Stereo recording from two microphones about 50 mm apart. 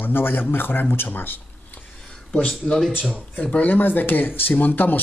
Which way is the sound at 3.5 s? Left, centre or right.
Left.